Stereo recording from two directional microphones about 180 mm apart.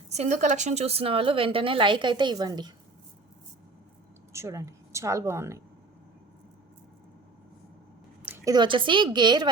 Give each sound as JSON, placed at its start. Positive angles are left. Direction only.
{"t": 0.1, "sound": "a woman's voice", "side_deg": -40}
{"t": 4.3, "sound": "speech", "side_deg": -15}
{"t": 8.2, "sound": "a sound", "side_deg": -10}
{"t": 8.5, "sound": "a woman's voice", "side_deg": -25}